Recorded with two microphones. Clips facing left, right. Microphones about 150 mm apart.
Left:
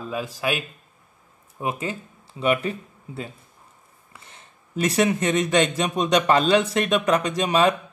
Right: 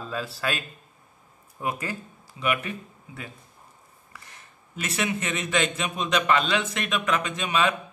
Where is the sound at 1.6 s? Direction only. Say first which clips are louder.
Left 3 dB; 25° left (ahead or behind).